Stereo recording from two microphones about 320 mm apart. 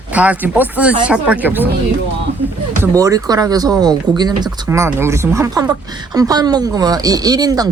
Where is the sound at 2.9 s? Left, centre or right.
Centre.